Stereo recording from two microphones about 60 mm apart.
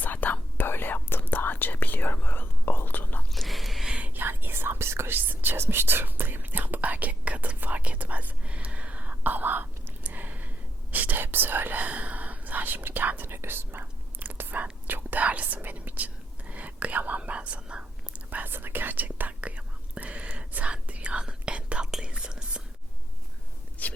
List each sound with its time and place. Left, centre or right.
0.0 s whispering: left
3.3 s a sound: centre
3.8 s whispering: centre
4.1 s speech: right
5.1 s whispering: right
10.1 s a sound: right
10.9 s whispering: right
18.3 s whispering: right; by 22.6 s centre
23.8 s whispering: left